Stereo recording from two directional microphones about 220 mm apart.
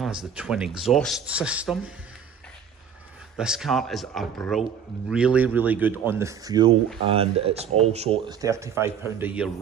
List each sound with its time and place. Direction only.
0.4 s speech: 5° right (ahead or behind)
3.3 s speech: 5° right (ahead or behind)